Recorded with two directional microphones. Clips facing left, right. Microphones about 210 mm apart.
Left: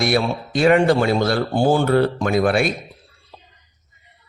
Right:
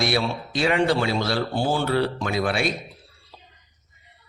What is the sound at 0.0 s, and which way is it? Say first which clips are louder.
A man's voice: left 4 dB; 50° left (ahead or behind).